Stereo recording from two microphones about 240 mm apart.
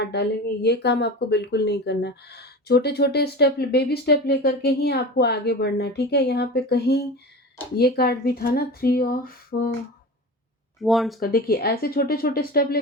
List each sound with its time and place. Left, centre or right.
0.0 s a woman's voice: left
10.8 s speech: centre
11.2 s speech: left